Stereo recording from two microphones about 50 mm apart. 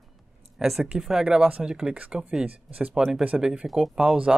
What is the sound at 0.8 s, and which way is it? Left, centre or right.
Speech, centre.